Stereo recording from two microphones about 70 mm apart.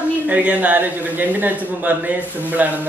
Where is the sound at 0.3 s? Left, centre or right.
Right.